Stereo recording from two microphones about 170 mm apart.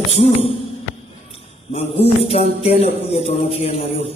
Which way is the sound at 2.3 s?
45° left (ahead or behind).